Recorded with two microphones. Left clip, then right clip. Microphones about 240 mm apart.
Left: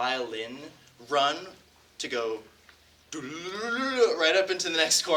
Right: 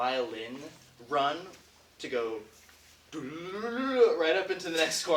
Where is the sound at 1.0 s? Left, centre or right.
Left.